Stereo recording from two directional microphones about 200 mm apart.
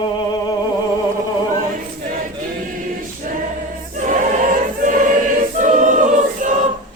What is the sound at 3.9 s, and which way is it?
Choir, 40° right (ahead or behind).